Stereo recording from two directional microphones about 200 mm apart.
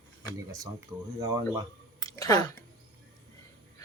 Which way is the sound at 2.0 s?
15° left (ahead or behind).